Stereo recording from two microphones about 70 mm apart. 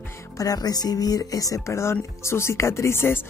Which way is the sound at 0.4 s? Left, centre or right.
Left.